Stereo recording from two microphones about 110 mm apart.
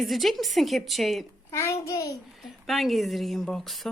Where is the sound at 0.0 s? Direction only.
Centre (ahead or behind).